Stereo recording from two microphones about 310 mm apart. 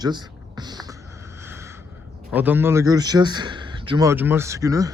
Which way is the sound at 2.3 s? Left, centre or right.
Centre.